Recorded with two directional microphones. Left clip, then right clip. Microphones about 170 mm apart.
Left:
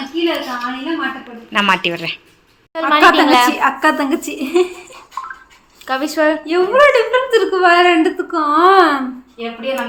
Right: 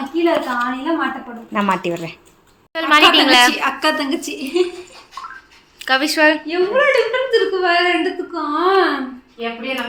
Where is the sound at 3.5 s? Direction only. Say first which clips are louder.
Left 4 dB; 50° left (ahead or behind); by 4.6 s 70° left (ahead or behind).